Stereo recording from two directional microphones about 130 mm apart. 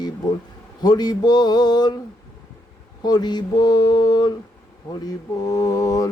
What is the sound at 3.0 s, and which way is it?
Mantra, 30° left (ahead or behind).